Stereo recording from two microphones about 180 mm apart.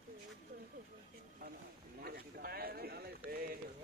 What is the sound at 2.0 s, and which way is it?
A man's voice, 60° right (ahead or behind).